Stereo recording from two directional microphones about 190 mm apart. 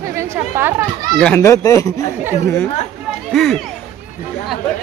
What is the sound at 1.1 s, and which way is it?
Speech, 5° left (ahead or behind).